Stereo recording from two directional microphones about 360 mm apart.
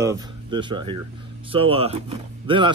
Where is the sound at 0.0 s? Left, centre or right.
Centre.